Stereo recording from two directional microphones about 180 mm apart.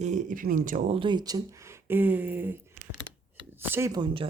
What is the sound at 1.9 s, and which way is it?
Speech, 10° right (ahead or behind).